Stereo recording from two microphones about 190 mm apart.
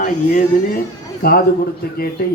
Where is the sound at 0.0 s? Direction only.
45° left (ahead or behind).